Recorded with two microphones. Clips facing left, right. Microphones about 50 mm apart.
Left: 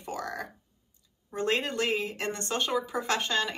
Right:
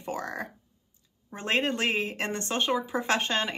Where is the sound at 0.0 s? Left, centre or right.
Right.